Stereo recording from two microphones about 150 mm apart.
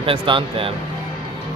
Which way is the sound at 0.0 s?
35° right (ahead or behind).